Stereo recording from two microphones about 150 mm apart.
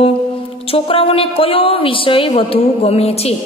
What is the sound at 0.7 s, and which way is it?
A man's voice, 40° left (ahead or behind).